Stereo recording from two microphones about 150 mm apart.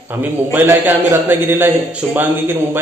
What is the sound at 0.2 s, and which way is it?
A man's voice, 10° right (ahead or behind).